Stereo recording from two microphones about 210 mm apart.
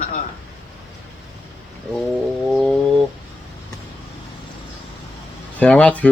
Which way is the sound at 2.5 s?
Centre (ahead or behind).